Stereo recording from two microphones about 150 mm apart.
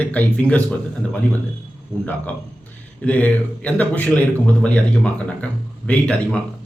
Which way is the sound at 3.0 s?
10° left (ahead or behind).